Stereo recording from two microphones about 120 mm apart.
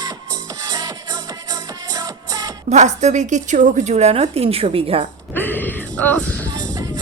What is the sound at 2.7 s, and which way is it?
A woman's voice, 75° right (ahead or behind).